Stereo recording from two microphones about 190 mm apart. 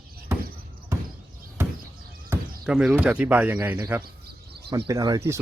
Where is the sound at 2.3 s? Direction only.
5° right (ahead or behind).